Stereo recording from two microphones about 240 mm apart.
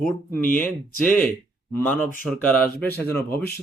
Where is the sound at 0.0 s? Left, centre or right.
Centre.